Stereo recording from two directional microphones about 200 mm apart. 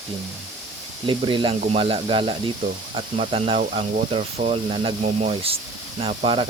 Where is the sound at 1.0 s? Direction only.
25° right (ahead or behind).